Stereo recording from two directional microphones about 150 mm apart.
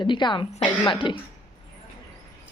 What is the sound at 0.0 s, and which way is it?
Speech, 30° left (ahead or behind).